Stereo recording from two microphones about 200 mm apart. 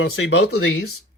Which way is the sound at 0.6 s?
90° left.